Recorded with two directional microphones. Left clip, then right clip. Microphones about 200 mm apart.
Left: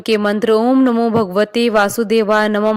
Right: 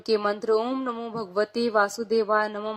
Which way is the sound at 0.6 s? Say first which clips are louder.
Left 15 dB; 20° left (ahead or behind).